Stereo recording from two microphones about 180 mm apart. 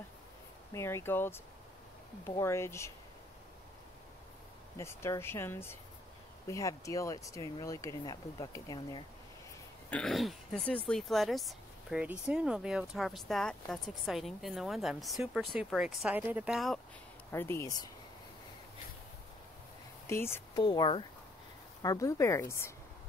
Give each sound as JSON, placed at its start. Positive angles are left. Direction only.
{"t": 0.7, "sound": "speech", "side_deg": 15}
{"t": 4.7, "sound": "speech", "side_deg": 15}
{"t": 9.8, "sound": "speech", "side_deg": 5}
{"t": 17.3, "sound": "speech", "side_deg": 15}
{"t": 20.1, "sound": "speech", "side_deg": 15}